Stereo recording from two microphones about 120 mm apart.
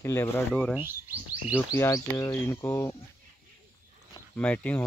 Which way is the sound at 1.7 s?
25° left (ahead or behind).